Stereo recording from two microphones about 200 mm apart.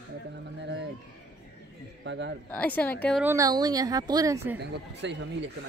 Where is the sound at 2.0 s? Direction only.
60° right (ahead or behind).